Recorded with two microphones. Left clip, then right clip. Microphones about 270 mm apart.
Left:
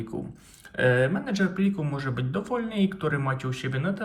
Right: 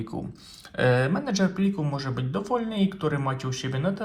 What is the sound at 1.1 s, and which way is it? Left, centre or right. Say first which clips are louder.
Speech: right 1 dB; centre.